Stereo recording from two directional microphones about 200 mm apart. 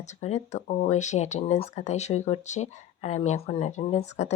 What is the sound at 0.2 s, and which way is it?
Speech, 35° left (ahead or behind).